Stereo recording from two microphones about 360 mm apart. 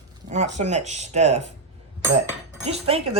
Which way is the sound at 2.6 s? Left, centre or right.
Centre.